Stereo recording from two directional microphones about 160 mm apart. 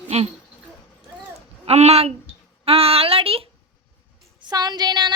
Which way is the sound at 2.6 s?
35° right (ahead or behind).